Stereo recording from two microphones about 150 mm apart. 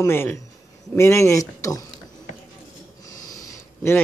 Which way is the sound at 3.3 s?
25° left (ahead or behind).